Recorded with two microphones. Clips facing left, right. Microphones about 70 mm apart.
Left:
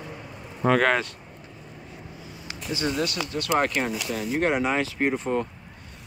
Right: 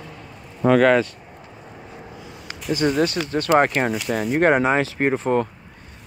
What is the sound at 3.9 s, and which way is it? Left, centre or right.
Speech, right.